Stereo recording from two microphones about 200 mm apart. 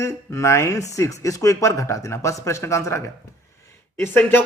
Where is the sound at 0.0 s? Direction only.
15° left (ahead or behind).